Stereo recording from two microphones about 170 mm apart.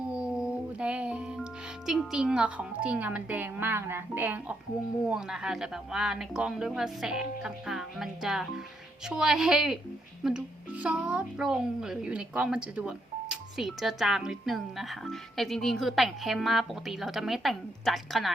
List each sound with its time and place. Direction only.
0.1 s music: 5° right (ahead or behind)
1.9 s a woman's voice: 5° right (ahead or behind)